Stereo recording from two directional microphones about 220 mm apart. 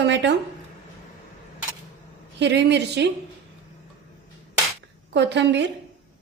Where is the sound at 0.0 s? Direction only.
50° right (ahead or behind).